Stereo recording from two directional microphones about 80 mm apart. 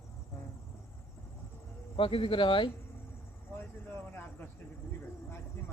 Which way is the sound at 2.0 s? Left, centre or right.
Left.